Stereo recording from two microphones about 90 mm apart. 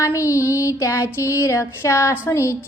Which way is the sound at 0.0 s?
35° left (ahead or behind).